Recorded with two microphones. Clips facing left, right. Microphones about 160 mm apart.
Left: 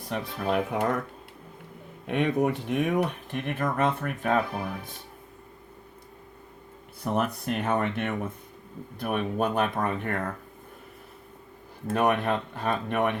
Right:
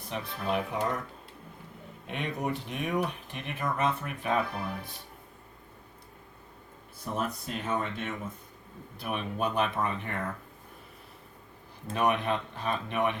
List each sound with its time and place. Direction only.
0.1 s speech: 55° left (ahead or behind)
2.0 s speech: 60° left (ahead or behind)
7.0 s speech: 65° left (ahead or behind)
9.0 s speech: 50° left (ahead or behind)
11.9 s speech: 55° left (ahead or behind)